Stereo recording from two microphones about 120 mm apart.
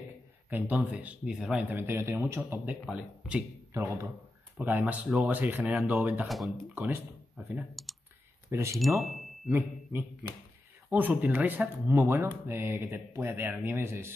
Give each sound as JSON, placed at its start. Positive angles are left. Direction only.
{"t": 0.5, "sound": "speech", "side_deg": -15}
{"t": 1.8, "sound": "speech", "side_deg": -20}
{"t": 3.7, "sound": "speech", "side_deg": -20}
{"t": 6.2, "sound": "speech", "side_deg": 0}
{"t": 6.7, "sound": "speech", "side_deg": -15}
{"t": 8.5, "sound": "speech", "side_deg": -25}
{"t": 8.7, "sound": "speech", "side_deg": 0}
{"t": 9.5, "sound": "speech", "side_deg": -20}